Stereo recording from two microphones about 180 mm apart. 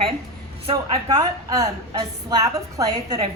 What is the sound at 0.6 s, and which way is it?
Speech, 30° right (ahead or behind).